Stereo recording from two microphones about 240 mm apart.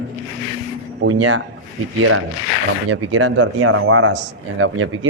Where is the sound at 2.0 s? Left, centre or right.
Right.